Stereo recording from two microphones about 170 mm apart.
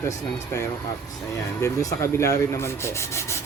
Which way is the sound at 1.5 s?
15° left (ahead or behind).